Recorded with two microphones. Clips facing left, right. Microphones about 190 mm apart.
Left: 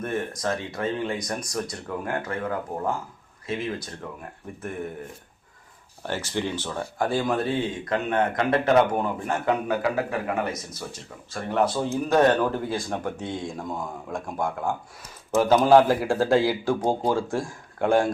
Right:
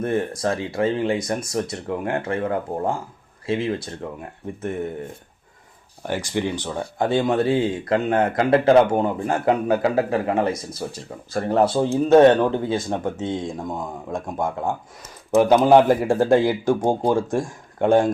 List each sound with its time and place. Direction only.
0.0 s speech: 30° right (ahead or behind)
6.0 s speech: 15° right (ahead or behind)
11.3 s speech: 35° right (ahead or behind); by 18.1 s 20° right (ahead or behind)